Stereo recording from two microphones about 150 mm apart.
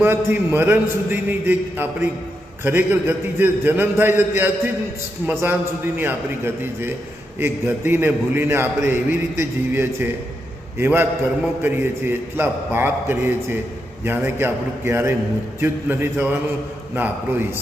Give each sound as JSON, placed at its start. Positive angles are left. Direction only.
{"t": 0.0, "sound": "a man's voice", "side_deg": -15}